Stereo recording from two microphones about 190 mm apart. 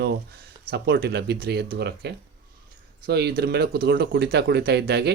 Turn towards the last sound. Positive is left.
turn(degrees=-60)  # may be behind; listen again after turning